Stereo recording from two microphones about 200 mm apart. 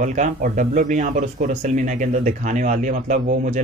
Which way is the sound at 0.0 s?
40° right (ahead or behind).